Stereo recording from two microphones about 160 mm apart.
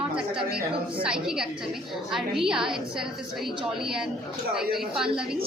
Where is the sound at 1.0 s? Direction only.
5° right (ahead or behind).